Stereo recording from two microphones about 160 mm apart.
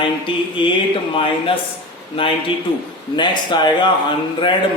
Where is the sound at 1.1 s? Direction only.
35° left (ahead or behind).